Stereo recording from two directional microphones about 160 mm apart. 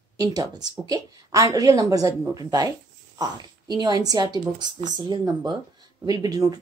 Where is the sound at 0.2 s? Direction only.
25° right (ahead or behind).